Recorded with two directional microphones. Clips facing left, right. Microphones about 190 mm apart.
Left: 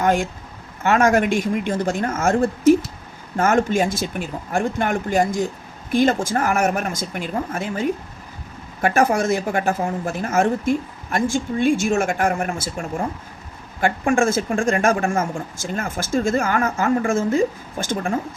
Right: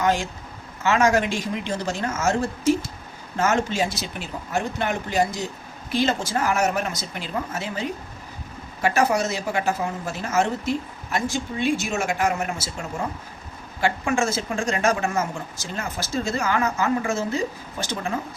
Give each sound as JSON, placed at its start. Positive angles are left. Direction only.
{"t": 0.0, "sound": "a woman's voice", "side_deg": 55}
{"t": 13.8, "sound": "a woman's voice", "side_deg": 50}